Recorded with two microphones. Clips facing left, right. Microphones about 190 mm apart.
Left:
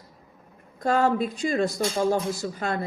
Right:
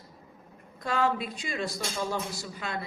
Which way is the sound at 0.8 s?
45° left (ahead or behind).